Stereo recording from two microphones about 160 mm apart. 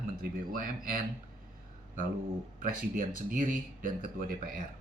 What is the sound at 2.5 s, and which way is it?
Speech, 60° right (ahead or behind).